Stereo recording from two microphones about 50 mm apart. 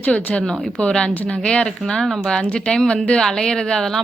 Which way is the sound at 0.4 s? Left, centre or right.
Centre.